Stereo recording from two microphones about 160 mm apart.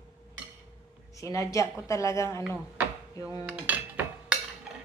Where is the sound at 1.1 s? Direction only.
20° left (ahead or behind).